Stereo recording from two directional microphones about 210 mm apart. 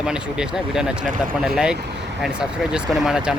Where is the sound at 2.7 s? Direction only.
Centre (ahead or behind).